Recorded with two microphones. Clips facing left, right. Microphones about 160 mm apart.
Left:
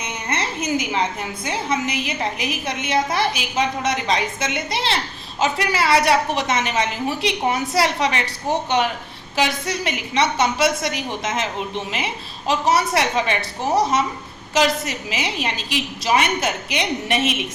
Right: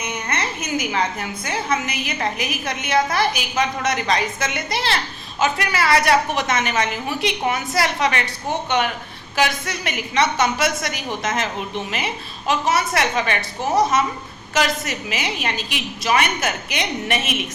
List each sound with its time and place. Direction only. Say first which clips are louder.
0.0 s a sound: even; 30° left (ahead or behind)
1.5 s a woman's voice: left 1 dB; 25° left (ahead or behind)
12.5 s a woman's voice: left 1 dB; 35° left (ahead or behind)
14.5 s a woman's voice: left 2 dB; 30° left (ahead or behind)